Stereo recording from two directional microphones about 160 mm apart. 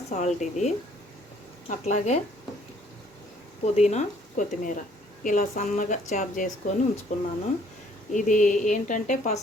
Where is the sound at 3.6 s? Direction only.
45° left (ahead or behind).